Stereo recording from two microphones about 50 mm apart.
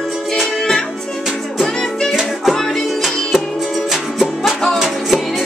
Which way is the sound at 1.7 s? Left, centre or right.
Centre.